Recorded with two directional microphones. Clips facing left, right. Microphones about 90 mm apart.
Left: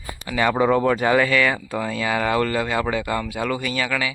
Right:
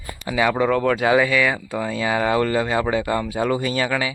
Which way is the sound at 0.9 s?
5° right (ahead or behind).